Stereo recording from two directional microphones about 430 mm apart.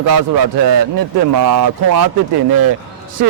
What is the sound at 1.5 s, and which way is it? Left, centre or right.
Speech, right.